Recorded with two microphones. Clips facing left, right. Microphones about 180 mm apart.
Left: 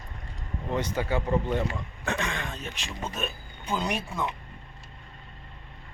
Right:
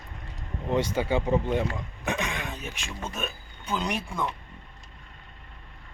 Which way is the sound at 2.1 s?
15° right (ahead or behind).